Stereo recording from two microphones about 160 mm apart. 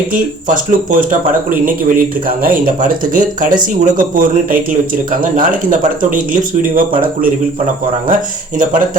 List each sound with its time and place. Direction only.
0.1 s speech: 55° right (ahead or behind)